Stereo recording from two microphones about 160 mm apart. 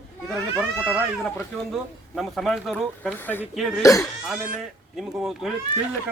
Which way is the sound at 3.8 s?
20° left (ahead or behind).